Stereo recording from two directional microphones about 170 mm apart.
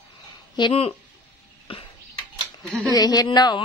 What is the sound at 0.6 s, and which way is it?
Speech, 30° left (ahead or behind).